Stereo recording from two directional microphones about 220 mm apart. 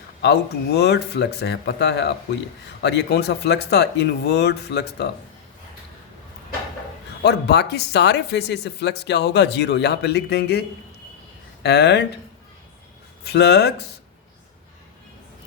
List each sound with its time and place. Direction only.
0.2 s speech: 50° left (ahead or behind)
7.2 s speech: 50° left (ahead or behind)
11.6 s speech: 50° left (ahead or behind)
13.2 s speech: 50° left (ahead or behind)